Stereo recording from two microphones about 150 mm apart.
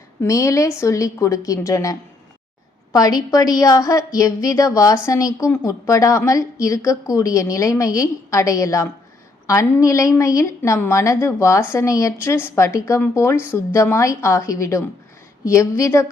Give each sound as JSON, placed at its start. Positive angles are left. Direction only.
{"t": 0.2, "sound": "a woman's voice", "side_deg": 20}